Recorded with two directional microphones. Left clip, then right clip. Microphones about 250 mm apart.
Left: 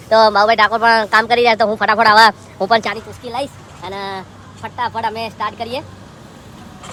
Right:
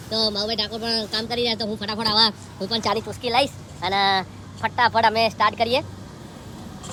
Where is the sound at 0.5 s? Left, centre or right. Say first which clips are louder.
Left 14 dB; centre.